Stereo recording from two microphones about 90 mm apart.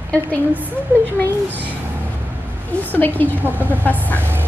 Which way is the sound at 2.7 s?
20° left (ahead or behind).